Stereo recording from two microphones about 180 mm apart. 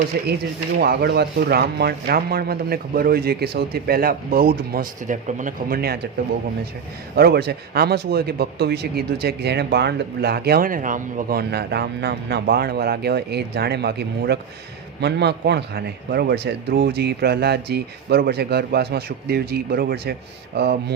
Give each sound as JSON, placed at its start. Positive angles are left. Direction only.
{"t": 0.1, "sound": "speech", "side_deg": -60}
{"t": 7.2, "sound": "speech", "side_deg": -60}